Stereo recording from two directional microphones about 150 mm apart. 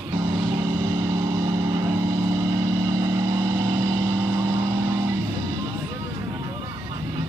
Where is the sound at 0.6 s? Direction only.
15° right (ahead or behind).